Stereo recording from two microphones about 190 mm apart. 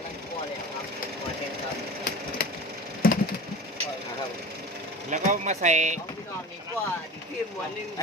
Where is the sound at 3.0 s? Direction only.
50° left (ahead or behind).